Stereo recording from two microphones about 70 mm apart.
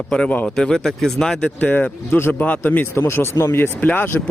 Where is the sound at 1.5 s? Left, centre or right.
Left.